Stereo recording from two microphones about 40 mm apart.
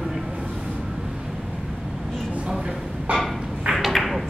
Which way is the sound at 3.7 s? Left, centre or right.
Centre.